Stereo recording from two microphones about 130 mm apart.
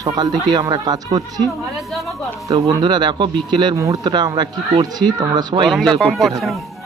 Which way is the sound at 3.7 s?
25° right (ahead or behind).